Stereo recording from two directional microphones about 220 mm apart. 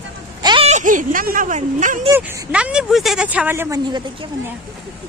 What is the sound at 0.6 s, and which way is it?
Speech, 35° right (ahead or behind).